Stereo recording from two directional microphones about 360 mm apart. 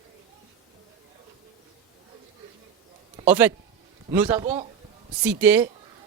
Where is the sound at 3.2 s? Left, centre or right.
Centre.